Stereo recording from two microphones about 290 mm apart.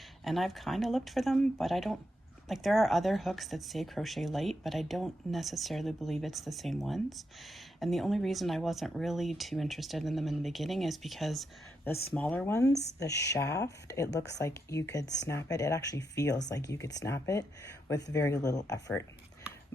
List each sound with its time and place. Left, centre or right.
0.3 s speech: centre
14.1 s speech: left
14.3 s speech: centre